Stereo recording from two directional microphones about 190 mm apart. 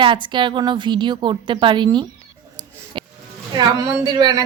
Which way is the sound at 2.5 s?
25° right (ahead or behind).